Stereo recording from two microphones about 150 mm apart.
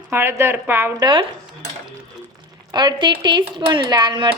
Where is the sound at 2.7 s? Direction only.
30° right (ahead or behind).